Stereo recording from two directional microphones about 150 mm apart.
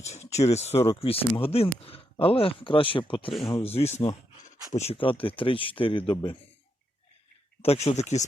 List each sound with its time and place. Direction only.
0.0 s speech: 45° left (ahead or behind)
7.6 s speech: 40° left (ahead or behind)